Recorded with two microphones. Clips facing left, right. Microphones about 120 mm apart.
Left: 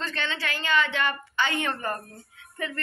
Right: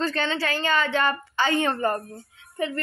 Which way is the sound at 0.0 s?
35° right (ahead or behind).